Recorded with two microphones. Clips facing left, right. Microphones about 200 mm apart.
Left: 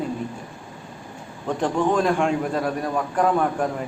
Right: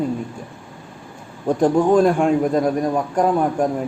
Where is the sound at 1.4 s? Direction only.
10° right (ahead or behind).